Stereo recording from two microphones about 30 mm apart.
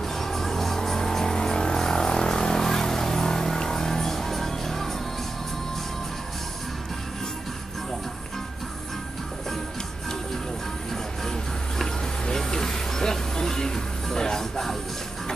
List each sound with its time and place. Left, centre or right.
0.0 s music: centre
12.4 s vehicle: centre
14.1 s music: centre